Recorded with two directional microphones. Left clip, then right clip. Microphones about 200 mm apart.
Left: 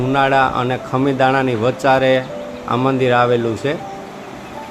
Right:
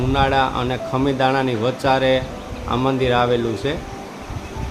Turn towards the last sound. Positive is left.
turn(degrees=0)  # may be behind; listen again after turning